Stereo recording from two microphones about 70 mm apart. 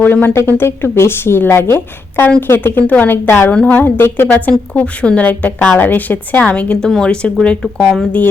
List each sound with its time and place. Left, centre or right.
0.0 s a woman's voice: left
3.5 s speech: centre
3.8 s a woman's voice: left
4.4 s a woman's voice: left; by 8.0 s centre